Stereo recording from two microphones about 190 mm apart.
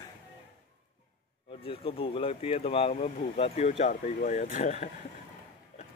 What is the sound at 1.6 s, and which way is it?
Speech, 30° left (ahead or behind).